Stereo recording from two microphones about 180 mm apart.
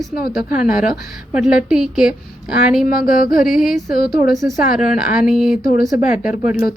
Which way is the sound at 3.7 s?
55° left (ahead or behind).